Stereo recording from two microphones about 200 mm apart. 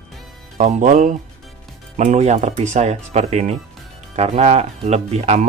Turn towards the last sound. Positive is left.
turn(degrees=-35)  # may be behind; listen again after turning